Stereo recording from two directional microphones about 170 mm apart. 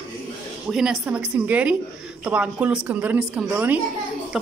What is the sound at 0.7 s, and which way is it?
A woman's voice, 5° right (ahead or behind).